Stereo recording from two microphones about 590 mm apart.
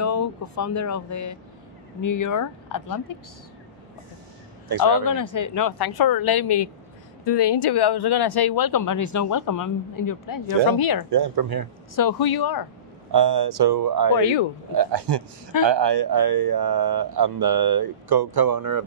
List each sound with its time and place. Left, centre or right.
0.0 s speech: left
4.8 s speech: left
11.1 s speech: right
11.9 s speech: left
13.1 s speech: right